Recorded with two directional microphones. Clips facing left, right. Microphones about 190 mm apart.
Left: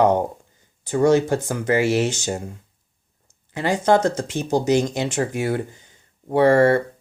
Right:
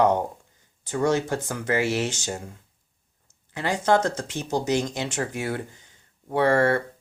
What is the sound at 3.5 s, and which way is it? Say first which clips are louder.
Speech: left 5 dB; 15° left (ahead or behind).